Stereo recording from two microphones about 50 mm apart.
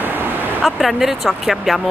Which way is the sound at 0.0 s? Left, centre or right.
Right.